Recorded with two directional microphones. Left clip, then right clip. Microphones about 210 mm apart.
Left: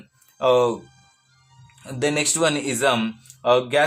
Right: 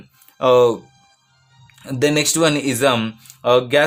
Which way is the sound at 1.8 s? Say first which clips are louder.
Right 5 dB; 35° right (ahead or behind).